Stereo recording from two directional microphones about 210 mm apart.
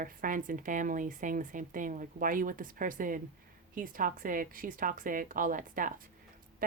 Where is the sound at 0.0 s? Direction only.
40° right (ahead or behind).